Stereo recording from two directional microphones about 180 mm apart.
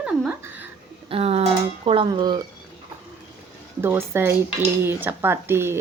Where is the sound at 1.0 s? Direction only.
35° right (ahead or behind).